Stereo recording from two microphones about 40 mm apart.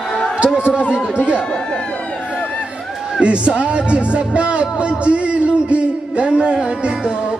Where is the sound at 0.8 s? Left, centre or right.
Right.